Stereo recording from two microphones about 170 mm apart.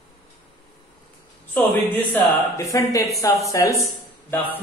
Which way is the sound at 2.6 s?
20° left (ahead or behind).